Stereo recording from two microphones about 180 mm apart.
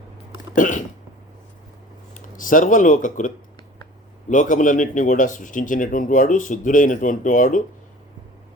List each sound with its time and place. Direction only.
0.5 s cough: 50° left (ahead or behind)
2.1 s a man's voice: 45° left (ahead or behind)